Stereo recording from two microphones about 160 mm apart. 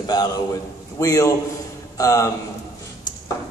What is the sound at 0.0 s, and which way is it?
A man's voice, 25° left (ahead or behind).